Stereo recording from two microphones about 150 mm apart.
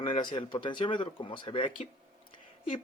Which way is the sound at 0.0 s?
35° left (ahead or behind).